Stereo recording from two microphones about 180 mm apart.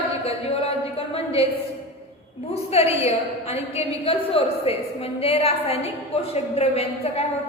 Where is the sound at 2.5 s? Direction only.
35° left (ahead or behind).